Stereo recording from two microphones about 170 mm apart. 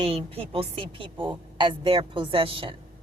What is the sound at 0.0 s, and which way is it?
A woman's voice, 35° right (ahead or behind).